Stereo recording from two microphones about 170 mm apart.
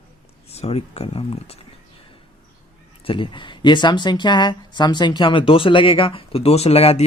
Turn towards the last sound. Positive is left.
turn(degrees=35)  # may be behind; listen again after turning